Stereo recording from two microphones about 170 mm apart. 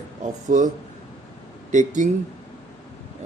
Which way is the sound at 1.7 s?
45° right (ahead or behind).